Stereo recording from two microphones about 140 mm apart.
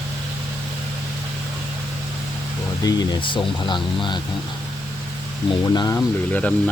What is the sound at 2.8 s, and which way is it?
Speech, 30° left (ahead or behind).